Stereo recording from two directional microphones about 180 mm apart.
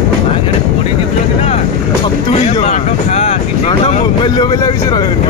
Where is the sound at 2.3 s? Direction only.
35° left (ahead or behind).